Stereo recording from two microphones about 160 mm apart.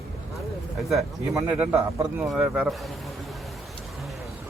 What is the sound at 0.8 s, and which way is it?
A man's voice, centre (ahead or behind).